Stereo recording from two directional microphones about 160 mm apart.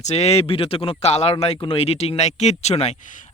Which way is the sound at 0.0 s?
40° left (ahead or behind).